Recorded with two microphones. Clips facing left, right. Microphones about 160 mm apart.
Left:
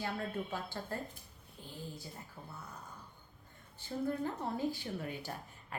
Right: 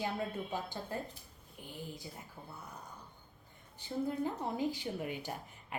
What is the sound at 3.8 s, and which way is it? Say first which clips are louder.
A woman's voice: right 1 dB; 15° right (ahead or behind).